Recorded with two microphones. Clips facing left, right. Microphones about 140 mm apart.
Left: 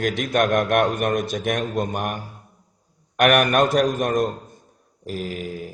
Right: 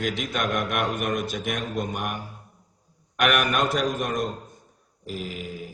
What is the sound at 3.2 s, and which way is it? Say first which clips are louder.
A man's voice: left 6 dB; 55° left (ahead or behind).